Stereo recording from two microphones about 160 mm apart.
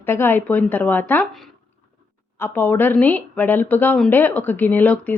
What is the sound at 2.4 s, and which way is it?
A woman's voice, 10° left (ahead or behind).